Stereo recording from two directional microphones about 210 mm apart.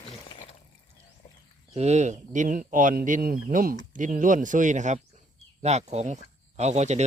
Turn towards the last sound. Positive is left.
turn(degrees=-35)  # may be behind; listen again after turning